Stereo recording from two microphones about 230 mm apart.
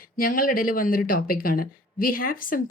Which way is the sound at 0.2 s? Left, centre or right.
Left.